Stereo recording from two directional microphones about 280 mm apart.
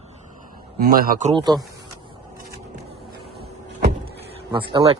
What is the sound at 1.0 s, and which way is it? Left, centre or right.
Speech, right.